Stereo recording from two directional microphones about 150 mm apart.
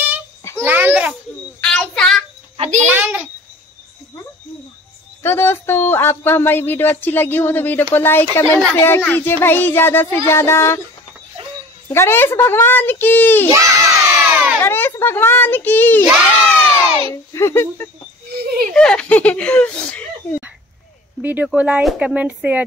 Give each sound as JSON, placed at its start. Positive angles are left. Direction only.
{"t": 0.6, "sound": "babbling", "side_deg": -15}
{"t": 1.6, "sound": "a sound", "side_deg": 5}
{"t": 2.5, "sound": "a sound", "side_deg": -45}
{"t": 2.9, "sound": "speech", "side_deg": -15}
{"t": 5.2, "sound": "speech", "side_deg": 15}
{"t": 11.9, "sound": "speech", "side_deg": 15}
{"t": 13.5, "sound": "crowd", "side_deg": -20}
{"t": 14.6, "sound": "a child's voice", "side_deg": 15}
{"t": 17.1, "sound": "speech", "side_deg": 20}
{"t": 18.3, "sound": "a sound", "side_deg": -90}
{"t": 18.7, "sound": "speech", "side_deg": 5}
{"t": 21.2, "sound": "speech", "side_deg": -10}